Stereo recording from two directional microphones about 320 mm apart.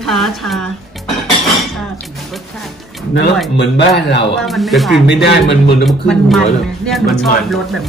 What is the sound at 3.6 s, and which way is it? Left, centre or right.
Speech, left.